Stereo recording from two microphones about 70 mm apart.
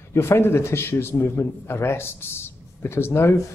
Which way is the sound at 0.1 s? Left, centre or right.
Left.